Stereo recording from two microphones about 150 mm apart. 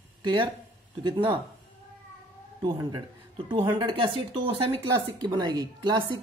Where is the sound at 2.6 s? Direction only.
30° right (ahead or behind).